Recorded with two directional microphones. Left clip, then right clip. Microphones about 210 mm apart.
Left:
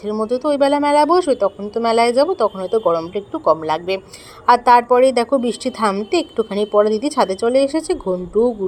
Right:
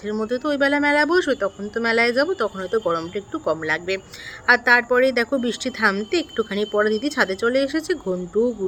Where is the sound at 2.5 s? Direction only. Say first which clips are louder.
Left 4 dB; 15° right (ahead or behind).